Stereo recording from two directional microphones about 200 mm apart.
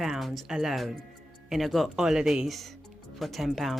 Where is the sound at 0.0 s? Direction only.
Centre (ahead or behind).